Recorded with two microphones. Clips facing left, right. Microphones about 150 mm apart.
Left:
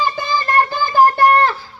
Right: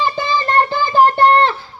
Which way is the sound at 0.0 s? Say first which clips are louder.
Right 1 dB; 20° right (ahead or behind).